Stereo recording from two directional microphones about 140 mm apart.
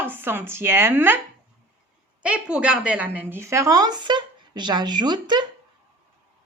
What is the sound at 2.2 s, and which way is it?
A woman's voice, 5° right (ahead or behind).